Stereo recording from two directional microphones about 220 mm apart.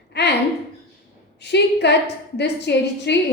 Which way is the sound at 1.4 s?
50° left (ahead or behind).